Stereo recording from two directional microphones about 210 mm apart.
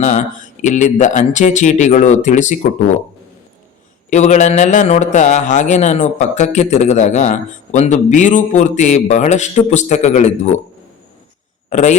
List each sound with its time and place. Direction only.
0.0 s a man's voice: 35° left (ahead or behind)
4.1 s a man's voice: 35° left (ahead or behind)
11.7 s a man's voice: 35° left (ahead or behind)